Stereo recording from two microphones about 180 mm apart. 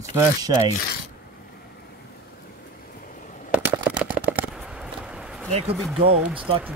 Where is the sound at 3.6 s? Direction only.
10° right (ahead or behind).